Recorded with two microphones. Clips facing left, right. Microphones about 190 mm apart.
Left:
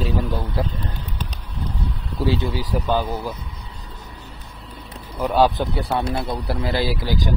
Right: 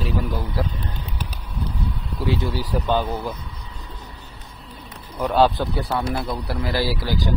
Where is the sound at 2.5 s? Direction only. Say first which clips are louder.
Even; 15° left (ahead or behind).